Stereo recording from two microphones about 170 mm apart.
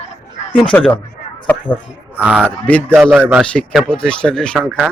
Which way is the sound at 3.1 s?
10° right (ahead or behind).